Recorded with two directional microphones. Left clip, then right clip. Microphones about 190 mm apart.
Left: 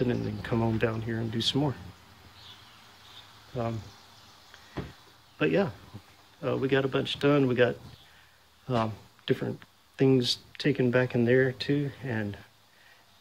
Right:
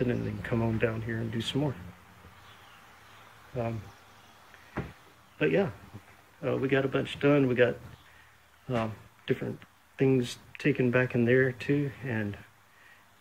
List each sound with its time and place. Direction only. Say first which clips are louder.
0.0 s speech: left 1 dB; 10° left (ahead or behind)
3.5 s speech: left 1 dB; 15° left (ahead or behind)
5.4 s speech: even; 15° left (ahead or behind)